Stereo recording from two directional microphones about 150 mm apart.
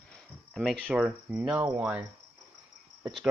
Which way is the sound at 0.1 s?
5° left (ahead or behind).